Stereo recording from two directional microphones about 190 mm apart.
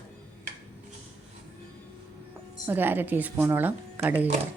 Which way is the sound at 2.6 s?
10° right (ahead or behind).